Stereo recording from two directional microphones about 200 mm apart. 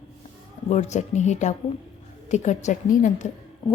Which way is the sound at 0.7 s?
35° left (ahead or behind).